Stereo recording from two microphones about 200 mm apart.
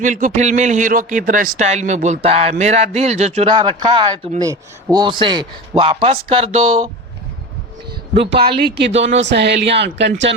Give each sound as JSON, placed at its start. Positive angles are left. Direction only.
{"t": 0.0, "sound": "a man's voice", "side_deg": -40}
{"t": 8.2, "sound": "speech", "side_deg": -60}